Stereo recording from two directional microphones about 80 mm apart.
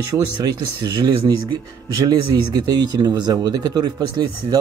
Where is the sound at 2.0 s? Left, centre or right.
Right.